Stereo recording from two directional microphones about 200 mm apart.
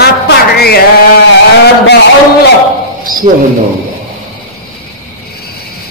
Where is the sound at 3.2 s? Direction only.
30° right (ahead or behind).